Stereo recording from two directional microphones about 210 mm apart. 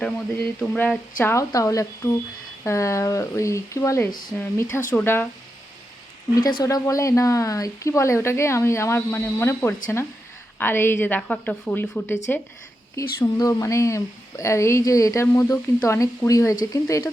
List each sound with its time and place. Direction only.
0.0 s a sound: 5° left (ahead or behind)
1.2 s speech: 15° left (ahead or behind)
6.4 s speech: 20° left (ahead or behind)